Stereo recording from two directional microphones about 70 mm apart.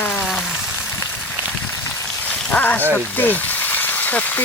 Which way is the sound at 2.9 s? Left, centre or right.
Left.